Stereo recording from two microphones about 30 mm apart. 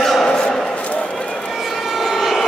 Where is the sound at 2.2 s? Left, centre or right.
Centre.